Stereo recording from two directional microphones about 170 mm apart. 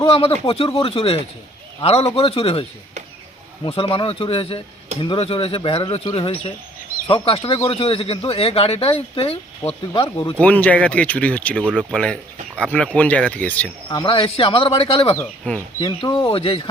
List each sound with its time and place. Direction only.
0.1 s speech: 35° left (ahead or behind)
10.4 s speech: 10° left (ahead or behind)
11.6 s speech: 5° right (ahead or behind)
11.9 s speech: 5° left (ahead or behind)
13.9 s speech: 30° left (ahead or behind)
15.1 s speech: 10° left (ahead or behind)
15.8 s speech: 25° left (ahead or behind)